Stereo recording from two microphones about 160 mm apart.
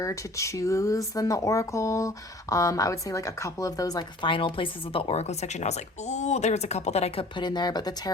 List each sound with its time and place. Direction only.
0.0 s speech: 20° left (ahead or behind)